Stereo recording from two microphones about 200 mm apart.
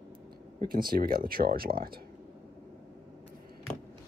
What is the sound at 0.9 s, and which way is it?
Speech, 45° right (ahead or behind).